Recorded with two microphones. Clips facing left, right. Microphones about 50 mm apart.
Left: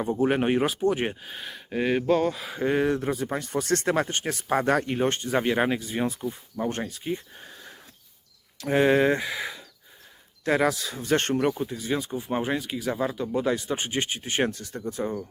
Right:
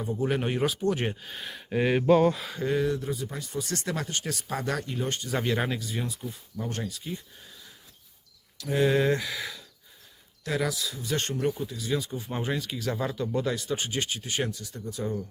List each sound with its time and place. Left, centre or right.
0.0 s speech: left; by 2.5 s centre
2.6 s speech: left
5.3 s speech: left
10.4 s speech: left